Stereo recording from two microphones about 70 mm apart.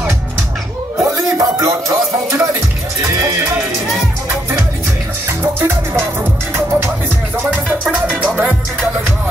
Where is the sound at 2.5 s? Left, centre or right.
Right.